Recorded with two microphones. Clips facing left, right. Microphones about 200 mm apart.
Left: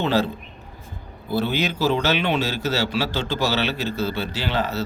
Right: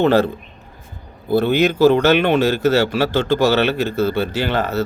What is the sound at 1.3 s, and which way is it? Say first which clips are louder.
A man's voice: right 8 dB; 55° right (ahead or behind).